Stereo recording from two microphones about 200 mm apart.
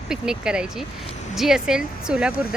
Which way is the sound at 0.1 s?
5° right (ahead or behind).